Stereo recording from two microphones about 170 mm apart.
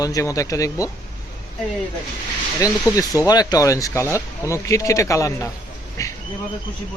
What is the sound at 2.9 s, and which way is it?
Speech, 20° left (ahead or behind).